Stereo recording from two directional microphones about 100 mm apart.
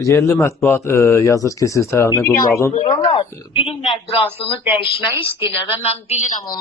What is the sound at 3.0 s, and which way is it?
Speech, 65° left (ahead or behind).